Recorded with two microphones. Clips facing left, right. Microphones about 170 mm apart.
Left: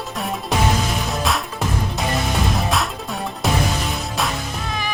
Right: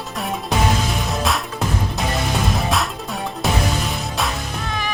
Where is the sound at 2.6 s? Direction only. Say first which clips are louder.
Even; centre (ahead or behind).